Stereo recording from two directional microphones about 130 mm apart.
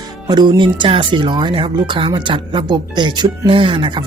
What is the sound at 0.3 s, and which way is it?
Speech, 35° right (ahead or behind).